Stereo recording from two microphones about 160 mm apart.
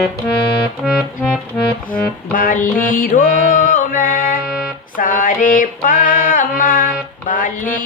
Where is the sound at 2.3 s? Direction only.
60° left (ahead or behind).